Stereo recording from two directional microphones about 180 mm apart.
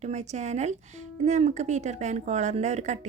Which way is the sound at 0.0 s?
40° right (ahead or behind).